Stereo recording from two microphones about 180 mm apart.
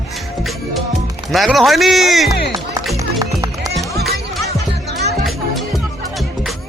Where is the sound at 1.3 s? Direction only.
Centre (ahead or behind).